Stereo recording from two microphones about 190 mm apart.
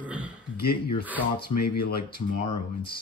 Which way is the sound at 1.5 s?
30° left (ahead or behind).